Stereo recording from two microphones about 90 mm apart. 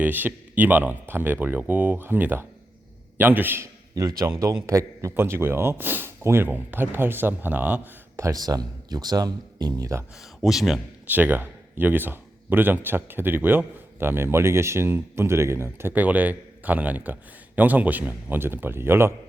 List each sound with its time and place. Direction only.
0.0 s speech: 20° right (ahead or behind)
3.9 s speech: 40° right (ahead or behind); by 8.2 s 20° right (ahead or behind)
8.2 s speech: 40° right (ahead or behind)
10.4 s a man's voice: centre (ahead or behind)
11.1 s speech: 20° right (ahead or behind)
15.9 s speech: 15° right (ahead or behind)